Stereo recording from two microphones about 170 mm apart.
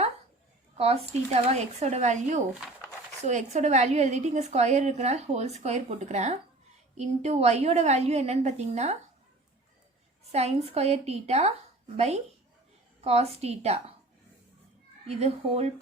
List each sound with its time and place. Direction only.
0.8 s a woman's voice: 35° right (ahead or behind)
10.3 s a woman's voice: 40° right (ahead or behind)
15.0 s a woman's voice: 40° right (ahead or behind)